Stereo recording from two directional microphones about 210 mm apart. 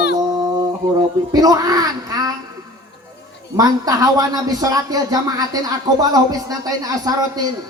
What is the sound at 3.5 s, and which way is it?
Speech, 20° right (ahead or behind).